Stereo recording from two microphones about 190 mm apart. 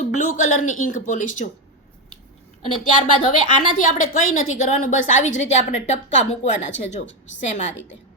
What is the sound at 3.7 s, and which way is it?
A woman's voice, 45° left (ahead or behind).